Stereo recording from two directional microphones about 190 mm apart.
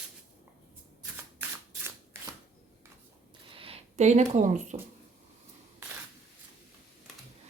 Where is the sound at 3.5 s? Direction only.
30° right (ahead or behind).